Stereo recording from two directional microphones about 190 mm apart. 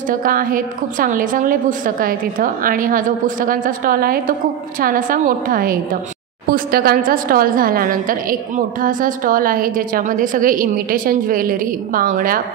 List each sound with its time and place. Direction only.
0.1 s a woman's voice: 45° right (ahead or behind)